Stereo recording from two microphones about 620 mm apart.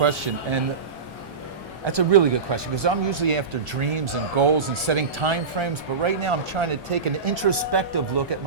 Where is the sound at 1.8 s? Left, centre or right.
Right.